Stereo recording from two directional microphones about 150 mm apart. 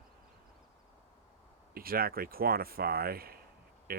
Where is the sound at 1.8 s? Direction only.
80° right.